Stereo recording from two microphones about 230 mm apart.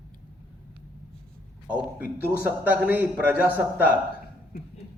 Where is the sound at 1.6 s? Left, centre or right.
Centre.